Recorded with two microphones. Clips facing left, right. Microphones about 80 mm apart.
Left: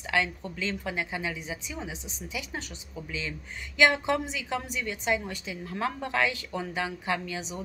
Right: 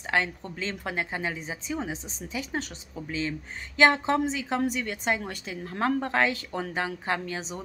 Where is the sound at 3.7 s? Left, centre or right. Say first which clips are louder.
Right 2 dB; right.